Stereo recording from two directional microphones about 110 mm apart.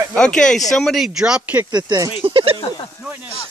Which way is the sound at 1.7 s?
40° right (ahead or behind).